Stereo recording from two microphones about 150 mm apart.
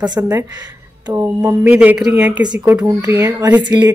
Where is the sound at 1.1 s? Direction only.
15° right (ahead or behind).